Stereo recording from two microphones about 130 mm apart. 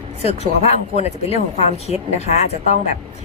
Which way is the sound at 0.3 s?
55° left (ahead or behind).